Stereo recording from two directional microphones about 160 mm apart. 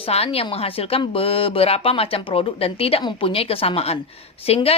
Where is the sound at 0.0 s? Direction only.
35° left (ahead or behind).